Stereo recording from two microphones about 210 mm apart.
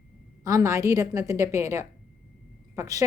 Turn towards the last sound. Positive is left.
turn(degrees=-15)  # may be behind; listen again after turning